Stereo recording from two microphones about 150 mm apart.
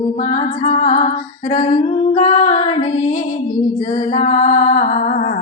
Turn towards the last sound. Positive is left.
turn(degrees=55)  # may be behind; listen again after turning